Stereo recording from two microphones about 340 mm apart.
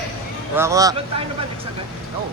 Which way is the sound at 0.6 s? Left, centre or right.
Centre.